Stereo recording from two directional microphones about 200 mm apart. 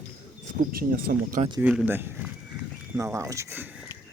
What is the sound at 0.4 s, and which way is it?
Speech, 45° right (ahead or behind).